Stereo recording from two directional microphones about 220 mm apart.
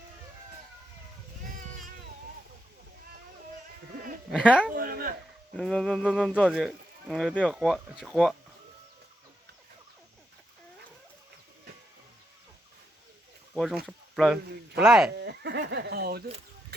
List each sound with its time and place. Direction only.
4.3 s speech: 5° right (ahead or behind)
4.7 s a sound: 40° right (ahead or behind)
5.5 s speech: centre (ahead or behind)
13.5 s a sound: centre (ahead or behind)
13.8 s speech: centre (ahead or behind)
15.2 s speech: 50° right (ahead or behind)